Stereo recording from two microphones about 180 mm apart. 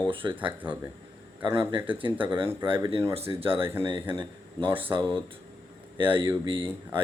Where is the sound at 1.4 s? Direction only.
25° right (ahead or behind).